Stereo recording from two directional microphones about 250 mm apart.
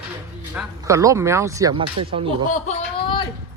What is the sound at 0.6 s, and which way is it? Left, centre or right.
Speech, centre.